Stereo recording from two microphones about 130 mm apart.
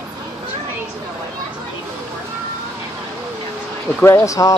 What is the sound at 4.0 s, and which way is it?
Speech, 20° left (ahead or behind).